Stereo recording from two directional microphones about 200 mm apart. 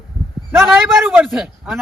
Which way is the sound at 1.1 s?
Centre (ahead or behind).